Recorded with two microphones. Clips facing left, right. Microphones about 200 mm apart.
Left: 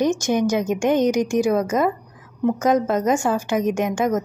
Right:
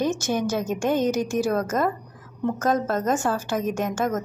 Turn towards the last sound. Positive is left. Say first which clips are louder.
# left 4 dB
turn(degrees=15)  # may be behind; listen again after turning